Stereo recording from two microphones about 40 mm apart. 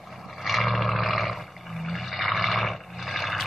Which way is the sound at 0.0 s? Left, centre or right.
Centre.